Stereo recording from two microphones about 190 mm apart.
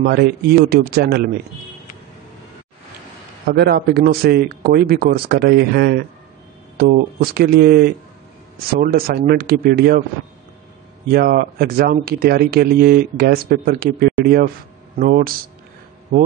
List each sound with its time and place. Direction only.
0.0 s a man's voice: 55° right (ahead or behind)
3.4 s a man's voice: 55° right (ahead or behind)
11.1 s speech: 50° right (ahead or behind)